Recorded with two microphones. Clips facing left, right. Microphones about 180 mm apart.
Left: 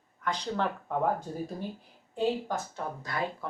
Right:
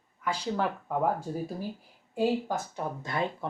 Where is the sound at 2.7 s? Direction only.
25° right (ahead or behind).